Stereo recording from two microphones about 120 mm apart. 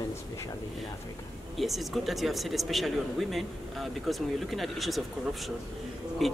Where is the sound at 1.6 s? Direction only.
Centre (ahead or behind).